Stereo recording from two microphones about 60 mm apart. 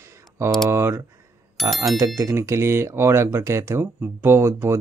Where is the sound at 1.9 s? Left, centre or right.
Right.